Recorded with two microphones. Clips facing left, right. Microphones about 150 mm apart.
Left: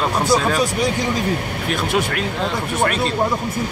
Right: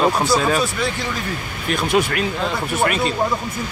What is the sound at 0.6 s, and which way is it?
Speech, 15° left (ahead or behind).